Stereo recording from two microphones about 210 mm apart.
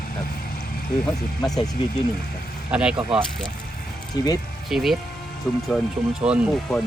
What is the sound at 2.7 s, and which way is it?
Speech, 5° right (ahead or behind).